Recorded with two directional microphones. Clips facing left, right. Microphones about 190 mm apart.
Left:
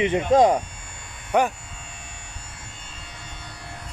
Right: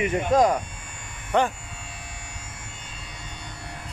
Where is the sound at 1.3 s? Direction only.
10° left (ahead or behind).